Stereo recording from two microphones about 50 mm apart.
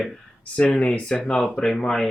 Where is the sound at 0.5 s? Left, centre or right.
Left; by 2.1 s centre.